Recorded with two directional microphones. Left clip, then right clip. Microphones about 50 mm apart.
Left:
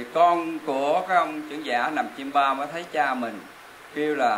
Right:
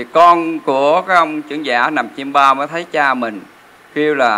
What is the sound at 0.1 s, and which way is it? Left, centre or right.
Speech, right.